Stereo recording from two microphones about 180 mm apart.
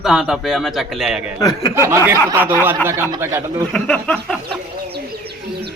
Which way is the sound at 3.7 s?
5° left (ahead or behind).